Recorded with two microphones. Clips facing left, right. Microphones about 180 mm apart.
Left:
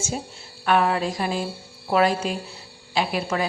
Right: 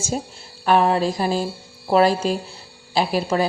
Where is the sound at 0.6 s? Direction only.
30° right (ahead or behind).